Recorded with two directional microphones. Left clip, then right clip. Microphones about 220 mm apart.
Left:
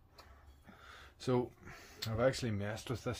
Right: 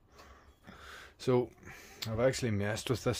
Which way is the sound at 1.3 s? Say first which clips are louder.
Right 5 dB; 20° right (ahead or behind).